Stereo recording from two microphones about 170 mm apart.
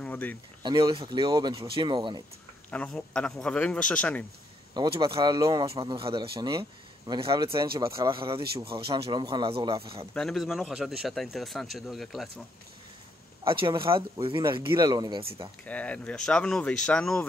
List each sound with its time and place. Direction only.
0.0 s a sound: 10° left (ahead or behind)
0.6 s speech: 25° right (ahead or behind)
2.7 s a man's voice: 5° left (ahead or behind)
4.7 s speech: 30° right (ahead or behind)
10.1 s a man's voice: centre (ahead or behind)
13.5 s speech: 30° right (ahead or behind)
15.6 s a man's voice: 10° left (ahead or behind)